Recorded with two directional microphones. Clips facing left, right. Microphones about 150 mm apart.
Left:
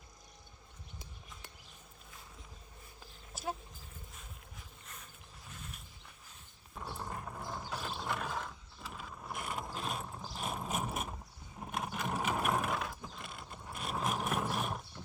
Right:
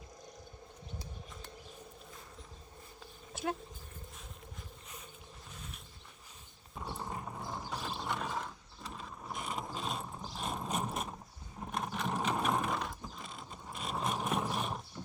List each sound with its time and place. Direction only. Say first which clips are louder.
5.5 s insect: left 1 dB; centre (ahead or behind)
6.7 s mechanisms: right 1 dB; 5° right (ahead or behind)
9.3 s ratchet: right 1 dB; 5° left (ahead or behind)